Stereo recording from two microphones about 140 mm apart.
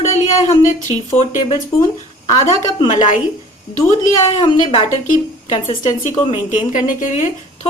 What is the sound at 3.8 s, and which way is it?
A woman's voice, 55° left (ahead or behind).